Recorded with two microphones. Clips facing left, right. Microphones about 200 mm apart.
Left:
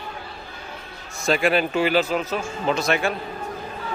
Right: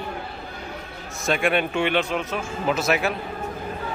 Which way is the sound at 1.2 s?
Centre (ahead or behind).